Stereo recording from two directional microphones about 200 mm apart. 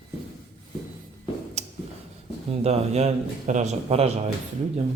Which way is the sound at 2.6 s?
30° right (ahead or behind).